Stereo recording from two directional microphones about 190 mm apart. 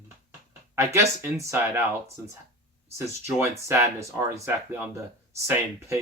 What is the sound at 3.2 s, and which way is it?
Speech, 15° right (ahead or behind).